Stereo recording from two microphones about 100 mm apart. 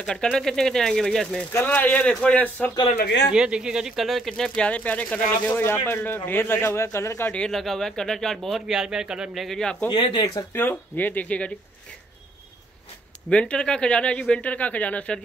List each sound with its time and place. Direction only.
0.0 s speech: 5° left (ahead or behind)
1.5 s speech: 15° left (ahead or behind)
3.3 s speech: 10° right (ahead or behind); by 7.3 s 25° left (ahead or behind)
7.3 s speech: 5° left (ahead or behind)
9.9 s speech: 60° left (ahead or behind)
10.5 s speech: 20° left (ahead or behind)
13.3 s speech: 10° left (ahead or behind)